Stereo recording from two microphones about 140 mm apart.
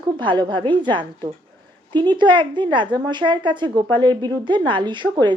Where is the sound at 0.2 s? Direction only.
35° right (ahead or behind).